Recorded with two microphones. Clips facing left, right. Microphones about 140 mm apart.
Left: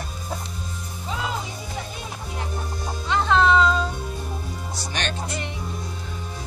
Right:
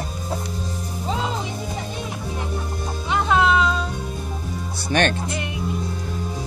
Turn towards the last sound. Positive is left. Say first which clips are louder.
# right 3 dB
turn(degrees=-5)  # may be behind; listen again after turning